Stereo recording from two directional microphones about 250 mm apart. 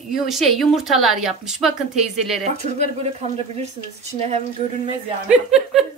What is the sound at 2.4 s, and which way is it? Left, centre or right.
Speech, right.